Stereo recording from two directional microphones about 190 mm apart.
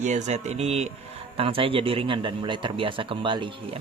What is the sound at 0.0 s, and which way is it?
A man's voice, 40° right (ahead or behind).